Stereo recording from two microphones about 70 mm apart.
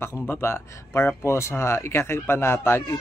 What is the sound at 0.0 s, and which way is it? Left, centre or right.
Speech, left.